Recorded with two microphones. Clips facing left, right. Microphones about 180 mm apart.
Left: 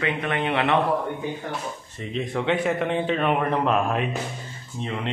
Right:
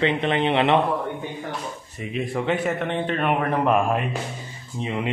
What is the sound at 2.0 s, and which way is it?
A man's voice, 5° right (ahead or behind).